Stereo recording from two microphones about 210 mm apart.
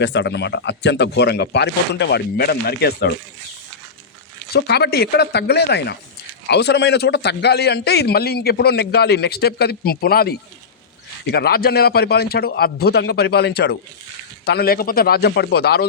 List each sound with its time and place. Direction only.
0.0 s speech: 55° left (ahead or behind)
4.5 s a man's voice: 50° left (ahead or behind)